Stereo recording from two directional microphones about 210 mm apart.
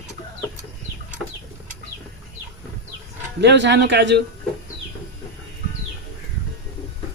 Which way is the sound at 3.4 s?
55° right (ahead or behind).